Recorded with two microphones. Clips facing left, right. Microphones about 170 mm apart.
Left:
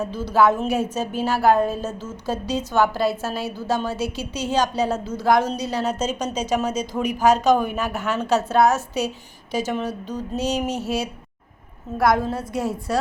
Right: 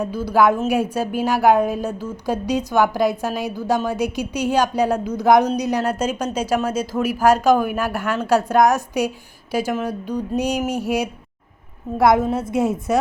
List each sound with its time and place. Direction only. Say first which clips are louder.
0.0 s a woman's voice: right 2 dB; 10° right (ahead or behind)